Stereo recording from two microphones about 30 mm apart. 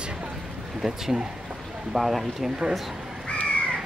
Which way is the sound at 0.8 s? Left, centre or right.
Right.